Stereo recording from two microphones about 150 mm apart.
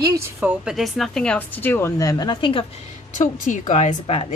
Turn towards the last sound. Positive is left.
turn(degrees=45)  # may be behind; listen again after turning